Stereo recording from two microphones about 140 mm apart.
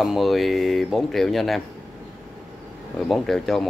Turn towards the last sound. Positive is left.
turn(degrees=0)  # may be behind; listen again after turning